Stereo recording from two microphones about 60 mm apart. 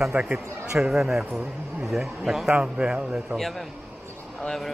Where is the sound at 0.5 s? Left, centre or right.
Right.